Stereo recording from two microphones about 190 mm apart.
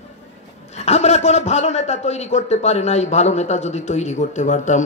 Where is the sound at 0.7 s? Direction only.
35° left (ahead or behind).